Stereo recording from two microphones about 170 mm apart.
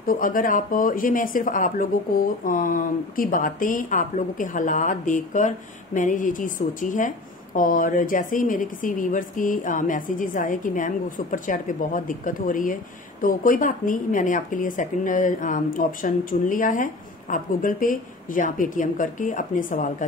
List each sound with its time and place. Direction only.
0.0 s speech: 55° left (ahead or behind)